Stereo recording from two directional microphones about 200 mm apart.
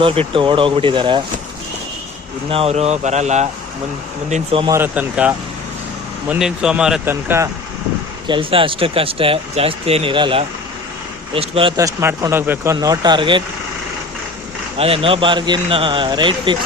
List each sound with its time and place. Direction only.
0.0 s speech: 25° right (ahead or behind)
2.5 s speech: 30° right (ahead or behind)
4.6 s speech: 10° right (ahead or behind)
8.3 s speech: 25° right (ahead or behind)
11.8 s speech: 15° right (ahead or behind)
14.8 s speech: 30° right (ahead or behind)